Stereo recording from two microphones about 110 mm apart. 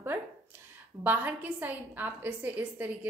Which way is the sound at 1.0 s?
15° right (ahead or behind).